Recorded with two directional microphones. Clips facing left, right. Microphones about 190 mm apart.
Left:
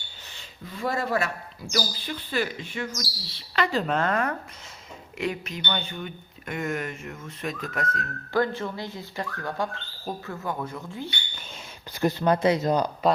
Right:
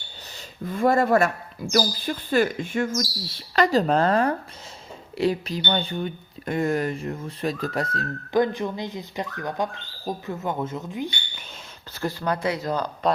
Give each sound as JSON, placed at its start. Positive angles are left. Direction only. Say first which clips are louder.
{"t": 0.3, "sound": "speech", "louder": "right 10 dB", "side_deg": -50}
{"t": 8.3, "sound": "speech", "louder": "right 3 dB", "side_deg": -15}
{"t": 11.9, "sound": "speech", "louder": "left 4 dB", "side_deg": 20}